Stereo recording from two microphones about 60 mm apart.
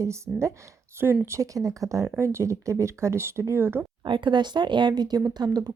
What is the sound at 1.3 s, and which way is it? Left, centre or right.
Speech, right.